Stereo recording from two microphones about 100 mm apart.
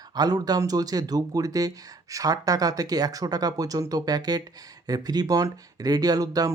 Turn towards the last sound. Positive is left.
turn(degrees=-40)  # may be behind; listen again after turning